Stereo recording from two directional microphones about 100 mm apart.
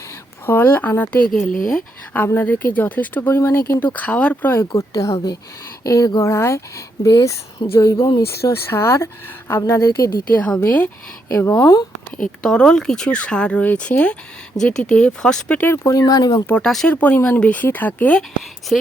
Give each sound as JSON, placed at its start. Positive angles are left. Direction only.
{"t": 0.4, "sound": "speech", "side_deg": 20}
{"t": 4.8, "sound": "speech", "side_deg": 30}
{"t": 10.3, "sound": "speech", "side_deg": 15}
{"t": 11.3, "sound": "speech", "side_deg": 30}
{"t": 12.1, "sound": "speech", "side_deg": 10}
{"t": 16.6, "sound": "speech", "side_deg": 5}